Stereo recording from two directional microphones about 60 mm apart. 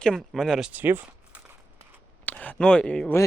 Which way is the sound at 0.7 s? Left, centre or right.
Right.